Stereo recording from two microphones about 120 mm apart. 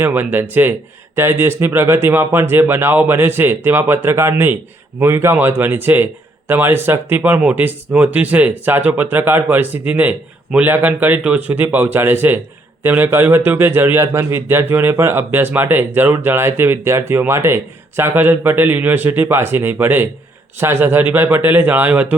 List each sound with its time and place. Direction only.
0.0 s a man's voice: 15° right (ahead or behind)